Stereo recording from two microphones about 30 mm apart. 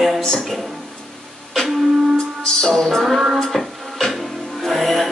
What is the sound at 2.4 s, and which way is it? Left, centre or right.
Music, centre.